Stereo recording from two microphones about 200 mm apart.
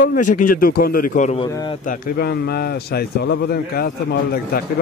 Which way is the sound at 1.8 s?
45° left (ahead or behind).